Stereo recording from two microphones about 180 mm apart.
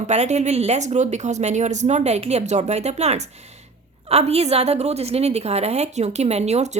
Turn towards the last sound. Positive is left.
turn(degrees=-40)  # may be behind; listen again after turning